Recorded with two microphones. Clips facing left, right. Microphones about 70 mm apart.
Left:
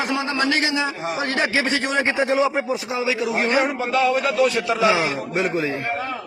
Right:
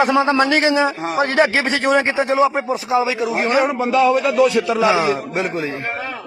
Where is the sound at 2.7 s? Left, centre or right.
Right.